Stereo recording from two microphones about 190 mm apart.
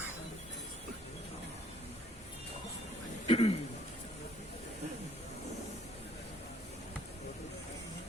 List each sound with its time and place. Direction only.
3.2 s speech: 30° left (ahead or behind)